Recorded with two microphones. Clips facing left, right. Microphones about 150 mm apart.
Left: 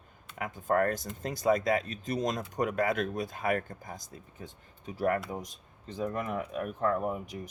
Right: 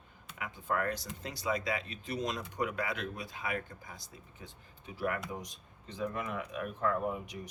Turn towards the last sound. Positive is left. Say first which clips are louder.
# left 3 dB
turn(degrees=40)  # may be behind; listen again after turning